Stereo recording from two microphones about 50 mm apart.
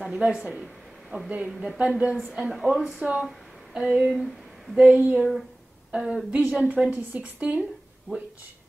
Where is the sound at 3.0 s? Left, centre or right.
Right.